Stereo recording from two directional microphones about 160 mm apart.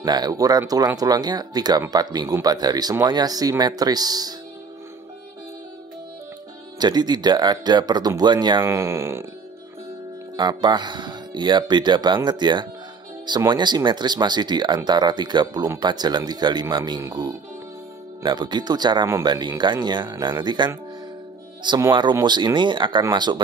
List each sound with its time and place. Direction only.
0.0 s speech: 25° right (ahead or behind)
6.8 s speech: 25° right (ahead or behind)
8.6 s speech: 15° right (ahead or behind)
10.3 s speech: 25° right (ahead or behind)